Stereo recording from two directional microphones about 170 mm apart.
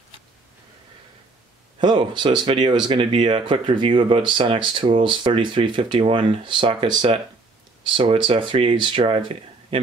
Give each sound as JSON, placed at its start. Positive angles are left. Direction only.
{"t": 1.8, "sound": "speech", "side_deg": -25}